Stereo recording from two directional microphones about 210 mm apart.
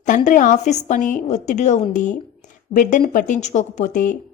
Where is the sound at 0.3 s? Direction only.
35° left (ahead or behind).